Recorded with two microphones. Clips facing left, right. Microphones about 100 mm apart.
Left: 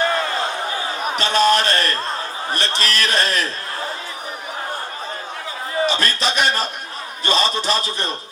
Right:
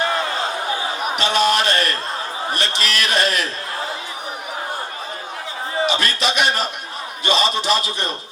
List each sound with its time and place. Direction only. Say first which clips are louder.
0.0 s a sound: left 1 dB; 40° left (ahead or behind)
1.1 s a man's voice: left 2 dB; 35° left (ahead or behind)
5.8 s a man's voice: even; 40° left (ahead or behind)